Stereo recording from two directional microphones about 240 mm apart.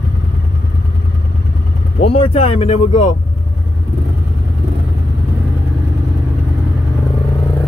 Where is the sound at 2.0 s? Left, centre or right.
Left.